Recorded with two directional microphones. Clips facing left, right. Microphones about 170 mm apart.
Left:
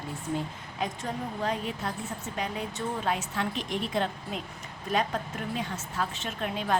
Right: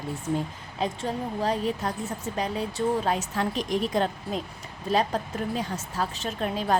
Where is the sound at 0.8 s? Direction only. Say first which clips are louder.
Right 4 dB; 30° right (ahead or behind).